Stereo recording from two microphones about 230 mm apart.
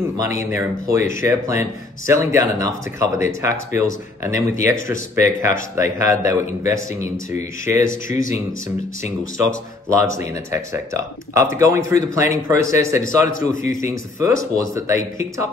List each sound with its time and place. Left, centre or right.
0.2 s speech: centre
9.4 s speech: centre
13.0 s a man's voice: left
13.8 s speech: centre